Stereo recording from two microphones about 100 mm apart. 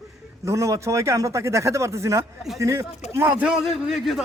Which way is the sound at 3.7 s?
Centre (ahead or behind).